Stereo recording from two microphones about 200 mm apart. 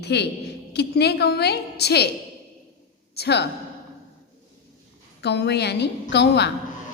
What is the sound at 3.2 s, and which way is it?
Speech, 55° left (ahead or behind).